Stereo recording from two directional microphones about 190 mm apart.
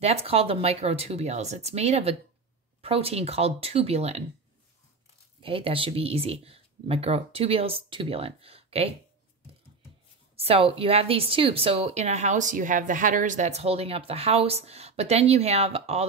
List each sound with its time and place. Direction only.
0.0 s a woman's voice: 30° right (ahead or behind)
5.4 s a woman's voice: 30° right (ahead or behind)
10.4 s a woman's voice: 30° right (ahead or behind)